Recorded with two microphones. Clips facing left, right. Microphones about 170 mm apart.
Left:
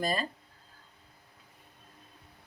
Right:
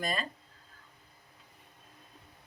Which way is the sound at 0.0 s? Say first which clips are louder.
Left 3 dB; 30° left (ahead or behind).